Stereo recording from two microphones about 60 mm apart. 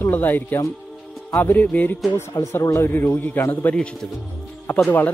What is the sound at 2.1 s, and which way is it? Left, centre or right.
Speech, left.